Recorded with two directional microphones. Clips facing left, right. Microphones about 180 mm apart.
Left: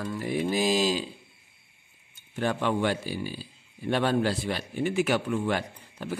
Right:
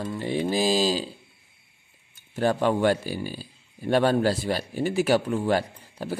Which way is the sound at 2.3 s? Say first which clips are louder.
Right 4 dB; 40° right (ahead or behind).